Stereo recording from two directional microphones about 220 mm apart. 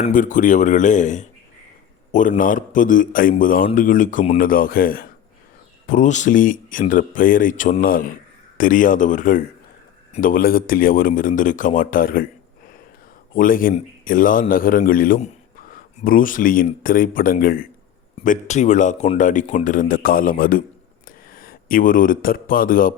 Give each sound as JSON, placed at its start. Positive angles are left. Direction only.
{"t": 0.0, "sound": "a man's voice", "side_deg": 35}
{"t": 2.4, "sound": "a man's voice", "side_deg": 40}
{"t": 13.3, "sound": "a man's voice", "side_deg": 40}